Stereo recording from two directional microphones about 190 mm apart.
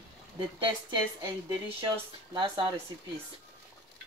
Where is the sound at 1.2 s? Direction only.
25° right (ahead or behind).